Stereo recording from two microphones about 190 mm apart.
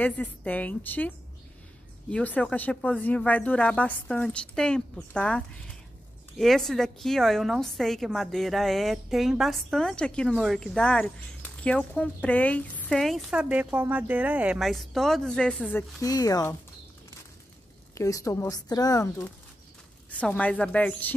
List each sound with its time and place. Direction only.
0.0 s a woman's voice: 10° left (ahead or behind)
16.0 s speech: 20° left (ahead or behind)
17.9 s speech: 15° left (ahead or behind)